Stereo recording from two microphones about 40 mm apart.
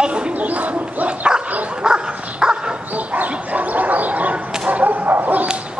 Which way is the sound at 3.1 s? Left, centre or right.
Right.